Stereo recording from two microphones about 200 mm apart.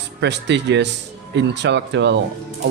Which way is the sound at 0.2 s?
60° right (ahead or behind).